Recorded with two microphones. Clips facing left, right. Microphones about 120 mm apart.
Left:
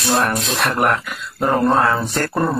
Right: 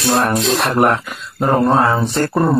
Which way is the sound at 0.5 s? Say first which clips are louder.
Right 3 dB; centre (ahead or behind).